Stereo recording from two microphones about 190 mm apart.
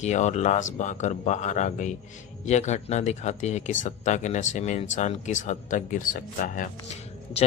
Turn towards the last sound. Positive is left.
turn(degrees=40)  # may be behind; listen again after turning